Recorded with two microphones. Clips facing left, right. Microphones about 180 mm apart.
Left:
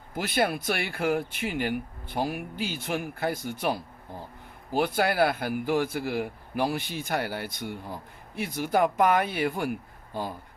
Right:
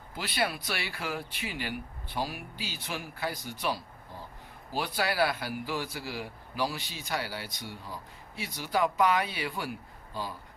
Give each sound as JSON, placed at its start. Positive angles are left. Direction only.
{"t": 0.1, "sound": "speech", "side_deg": 50}